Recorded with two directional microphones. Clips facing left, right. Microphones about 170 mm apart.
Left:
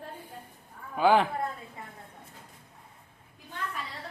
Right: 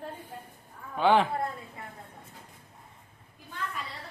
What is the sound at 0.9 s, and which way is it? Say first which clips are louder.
Speech: even; 5° left (ahead or behind).